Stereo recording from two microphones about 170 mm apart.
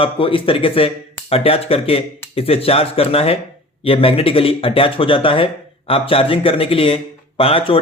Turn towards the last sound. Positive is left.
turn(degrees=30)  # may be behind; listen again after turning